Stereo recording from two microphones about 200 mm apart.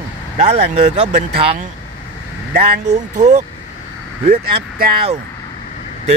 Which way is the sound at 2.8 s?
35° right (ahead or behind).